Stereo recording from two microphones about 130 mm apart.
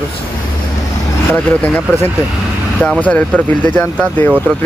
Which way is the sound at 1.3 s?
15° left (ahead or behind).